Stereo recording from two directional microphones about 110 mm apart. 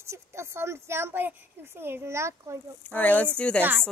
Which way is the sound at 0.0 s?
25° right (ahead or behind).